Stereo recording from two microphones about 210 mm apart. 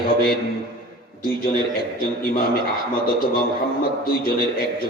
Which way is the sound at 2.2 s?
45° left (ahead or behind).